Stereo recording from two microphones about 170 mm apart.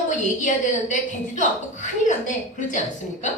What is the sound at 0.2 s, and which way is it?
Speech, 45° left (ahead or behind).